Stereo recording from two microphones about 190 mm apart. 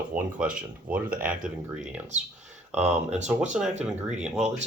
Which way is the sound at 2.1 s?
40° right (ahead or behind).